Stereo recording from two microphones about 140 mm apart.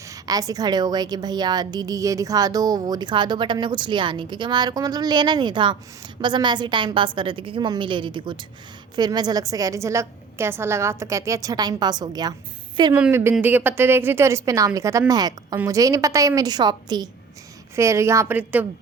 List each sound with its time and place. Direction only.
0.1 s a woman's voice: 25° right (ahead or behind)
12.9 s a woman's voice: 15° right (ahead or behind)